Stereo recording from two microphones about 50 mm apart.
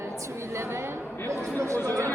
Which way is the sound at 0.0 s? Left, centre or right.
Right.